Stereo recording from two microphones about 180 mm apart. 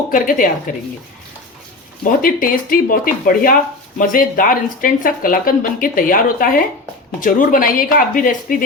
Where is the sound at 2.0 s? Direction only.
50° left (ahead or behind).